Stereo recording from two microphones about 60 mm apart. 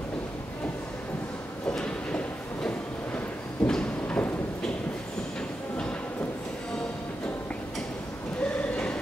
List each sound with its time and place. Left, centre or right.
3.6 s clip-clop: centre